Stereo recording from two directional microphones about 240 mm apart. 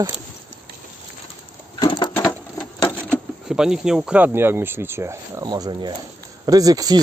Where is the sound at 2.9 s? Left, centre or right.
Centre.